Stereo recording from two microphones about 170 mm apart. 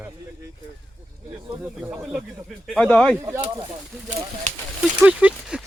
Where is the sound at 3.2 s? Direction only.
20° right (ahead or behind).